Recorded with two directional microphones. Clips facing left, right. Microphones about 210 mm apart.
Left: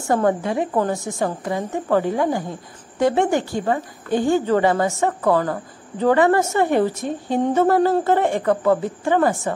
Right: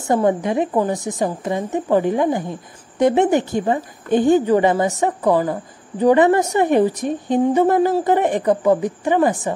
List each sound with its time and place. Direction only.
0.0 s a woman's voice: 20° right (ahead or behind)